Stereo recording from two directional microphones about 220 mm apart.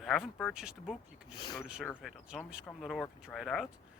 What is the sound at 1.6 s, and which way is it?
Speech, 5° right (ahead or behind).